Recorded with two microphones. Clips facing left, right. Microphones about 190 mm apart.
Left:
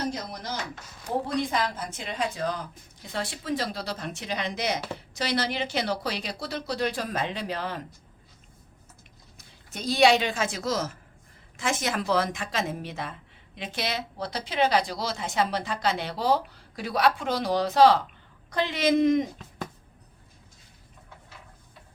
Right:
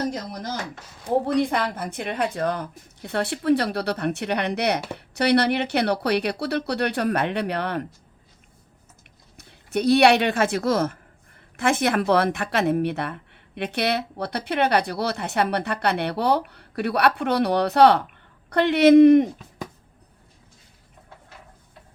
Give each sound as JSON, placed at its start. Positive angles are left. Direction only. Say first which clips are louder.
{"t": 1.3, "sound": "speech", "louder": "right 5 dB", "side_deg": -60}
{"t": 9.4, "sound": "speech", "louder": "right 13 dB", "side_deg": -65}